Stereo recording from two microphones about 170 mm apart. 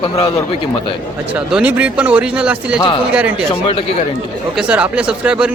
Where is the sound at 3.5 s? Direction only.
35° left (ahead or behind).